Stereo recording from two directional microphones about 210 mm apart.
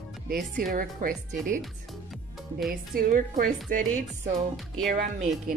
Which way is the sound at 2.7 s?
40° right (ahead or behind).